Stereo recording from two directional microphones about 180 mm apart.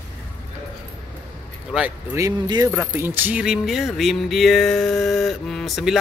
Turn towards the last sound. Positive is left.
turn(degrees=0)  # may be behind; listen again after turning